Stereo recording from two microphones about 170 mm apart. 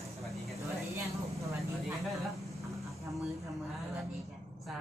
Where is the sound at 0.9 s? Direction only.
20° right (ahead or behind).